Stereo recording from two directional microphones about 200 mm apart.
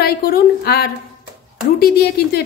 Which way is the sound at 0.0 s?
50° left (ahead or behind).